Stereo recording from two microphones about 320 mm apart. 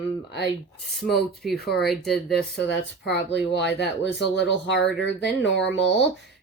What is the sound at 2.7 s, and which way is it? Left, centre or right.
Speech, left.